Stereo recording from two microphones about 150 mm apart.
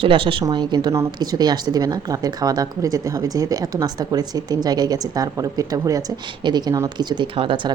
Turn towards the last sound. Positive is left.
turn(degrees=-35)  # may be behind; listen again after turning